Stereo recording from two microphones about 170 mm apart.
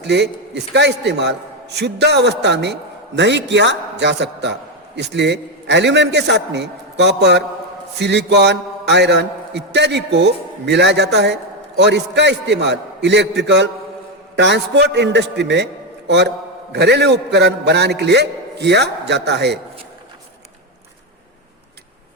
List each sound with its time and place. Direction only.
0.0 s mantra: 90° right
14.9 s a man's voice: 90° right